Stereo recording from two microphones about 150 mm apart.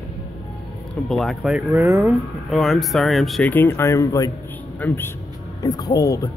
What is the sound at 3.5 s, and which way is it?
A woman's voice, 15° left (ahead or behind).